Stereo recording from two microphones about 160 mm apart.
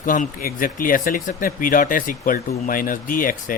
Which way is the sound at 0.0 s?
55° left (ahead or behind).